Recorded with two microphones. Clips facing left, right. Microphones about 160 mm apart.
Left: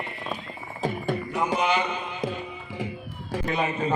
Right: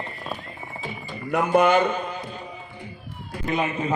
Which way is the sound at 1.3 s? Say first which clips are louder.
Right 8 dB; 55° right (ahead or behind).